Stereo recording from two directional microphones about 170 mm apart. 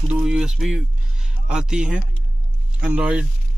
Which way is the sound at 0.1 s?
5° right (ahead or behind).